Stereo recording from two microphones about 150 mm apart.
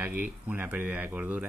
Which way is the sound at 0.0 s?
10° right (ahead or behind).